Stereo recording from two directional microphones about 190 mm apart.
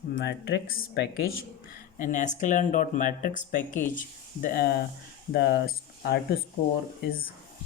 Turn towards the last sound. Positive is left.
turn(degrees=50)  # may be behind; listen again after turning